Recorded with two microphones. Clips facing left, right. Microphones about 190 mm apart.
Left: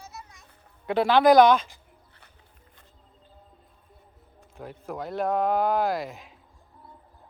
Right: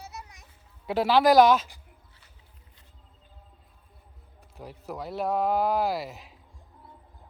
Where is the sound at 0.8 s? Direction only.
5° right (ahead or behind).